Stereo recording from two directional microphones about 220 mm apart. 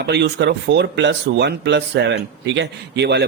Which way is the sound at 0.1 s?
50° right (ahead or behind).